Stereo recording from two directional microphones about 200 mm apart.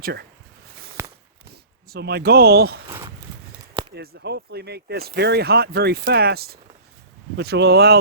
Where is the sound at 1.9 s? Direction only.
55° right (ahead or behind).